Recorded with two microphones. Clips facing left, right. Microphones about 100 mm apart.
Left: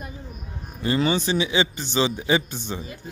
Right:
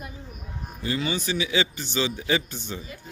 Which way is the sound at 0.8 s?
40° left (ahead or behind).